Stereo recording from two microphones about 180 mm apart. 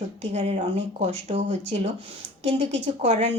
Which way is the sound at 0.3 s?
35° right (ahead or behind).